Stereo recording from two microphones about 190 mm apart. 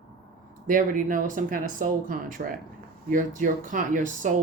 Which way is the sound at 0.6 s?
45° right (ahead or behind).